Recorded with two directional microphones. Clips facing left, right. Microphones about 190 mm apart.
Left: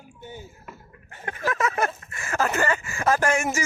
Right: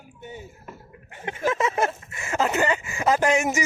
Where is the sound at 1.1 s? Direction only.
20° right (ahead or behind).